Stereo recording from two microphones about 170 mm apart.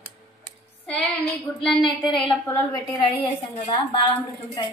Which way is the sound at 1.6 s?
Centre (ahead or behind).